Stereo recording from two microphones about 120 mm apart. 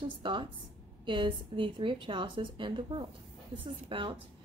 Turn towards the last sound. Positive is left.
turn(degrees=-45)  # may be behind; listen again after turning